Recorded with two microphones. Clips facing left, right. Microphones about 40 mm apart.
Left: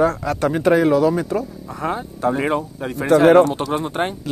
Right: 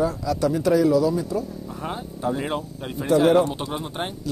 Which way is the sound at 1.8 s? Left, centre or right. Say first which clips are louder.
Left 7 dB; left.